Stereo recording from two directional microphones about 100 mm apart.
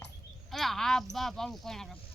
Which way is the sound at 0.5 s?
5° left (ahead or behind).